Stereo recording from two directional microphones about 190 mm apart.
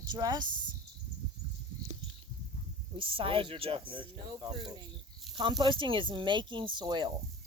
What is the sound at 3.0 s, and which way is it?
Speech, 30° right (ahead or behind).